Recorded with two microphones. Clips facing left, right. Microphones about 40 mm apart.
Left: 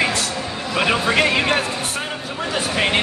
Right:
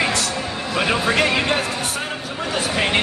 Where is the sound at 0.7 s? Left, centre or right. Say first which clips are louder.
Left 1 dB; centre.